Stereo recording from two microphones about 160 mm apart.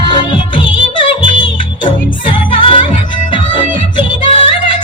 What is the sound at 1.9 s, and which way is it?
Music, 30° left (ahead or behind).